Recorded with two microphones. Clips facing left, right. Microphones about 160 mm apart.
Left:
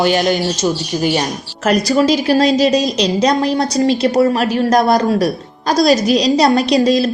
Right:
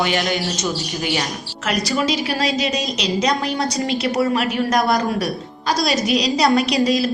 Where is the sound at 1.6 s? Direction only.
40° left (ahead or behind).